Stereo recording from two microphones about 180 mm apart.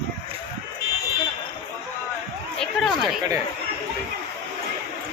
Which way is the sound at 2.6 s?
Centre (ahead or behind).